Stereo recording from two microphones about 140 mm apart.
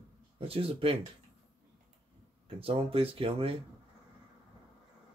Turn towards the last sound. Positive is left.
turn(degrees=-45)  # may be behind; listen again after turning